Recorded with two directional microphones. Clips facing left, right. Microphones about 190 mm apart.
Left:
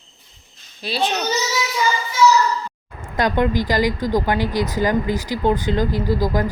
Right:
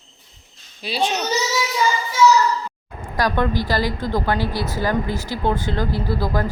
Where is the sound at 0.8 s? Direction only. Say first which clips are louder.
Even; 10° right (ahead or behind).